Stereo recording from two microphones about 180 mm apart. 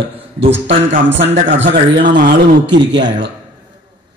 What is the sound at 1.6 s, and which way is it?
Speech, 70° right (ahead or behind).